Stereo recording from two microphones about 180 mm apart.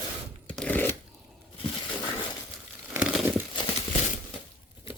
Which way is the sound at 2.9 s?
5° right (ahead or behind).